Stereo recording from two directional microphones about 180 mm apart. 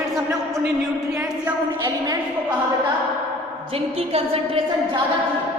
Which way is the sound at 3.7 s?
35° right (ahead or behind).